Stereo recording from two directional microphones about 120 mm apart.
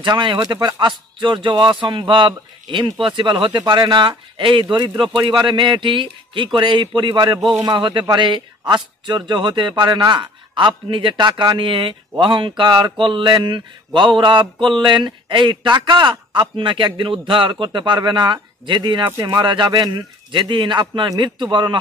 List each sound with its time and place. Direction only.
0.0 s a man's voice: 40° right (ahead or behind)